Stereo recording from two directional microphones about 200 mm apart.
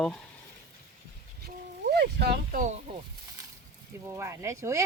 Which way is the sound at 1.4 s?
55° right (ahead or behind).